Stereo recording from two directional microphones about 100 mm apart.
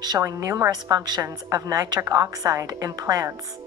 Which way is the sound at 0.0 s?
40° right (ahead or behind).